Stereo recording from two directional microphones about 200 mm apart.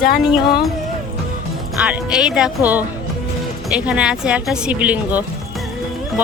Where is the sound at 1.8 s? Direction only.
5° right (ahead or behind).